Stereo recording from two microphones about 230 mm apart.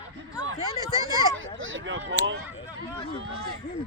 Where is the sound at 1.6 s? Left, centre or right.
Right.